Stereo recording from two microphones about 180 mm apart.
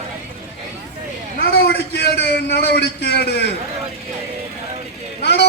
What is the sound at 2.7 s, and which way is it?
Speech, 70° left (ahead or behind).